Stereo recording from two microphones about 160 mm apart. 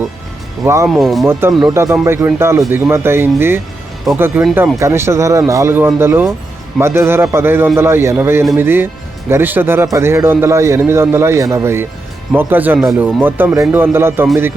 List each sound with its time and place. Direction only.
0.6 s speech: 20° right (ahead or behind)
0.9 s speech: centre (ahead or behind)
1.3 s a man's voice: 15° right (ahead or behind)
12.8 s speech: centre (ahead or behind)
13.2 s a man's voice: 15° right (ahead or behind)